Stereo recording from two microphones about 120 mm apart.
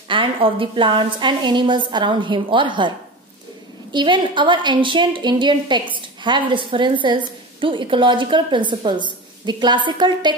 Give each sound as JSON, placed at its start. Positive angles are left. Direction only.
{"t": 0.1, "sound": "a woman's voice", "side_deg": -45}
{"t": 3.9, "sound": "a woman's voice", "side_deg": -40}